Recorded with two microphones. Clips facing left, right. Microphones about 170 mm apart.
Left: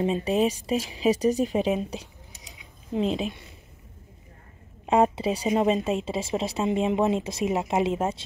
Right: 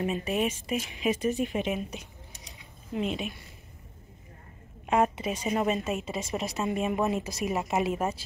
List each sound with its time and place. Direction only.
0.0 s speech: 30° left (ahead or behind)
4.8 s a woman's voice: 30° left (ahead or behind)